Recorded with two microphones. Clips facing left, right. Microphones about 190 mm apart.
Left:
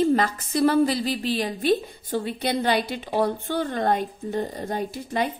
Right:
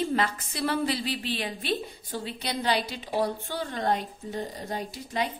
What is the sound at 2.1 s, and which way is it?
A woman's voice, 55° left (ahead or behind).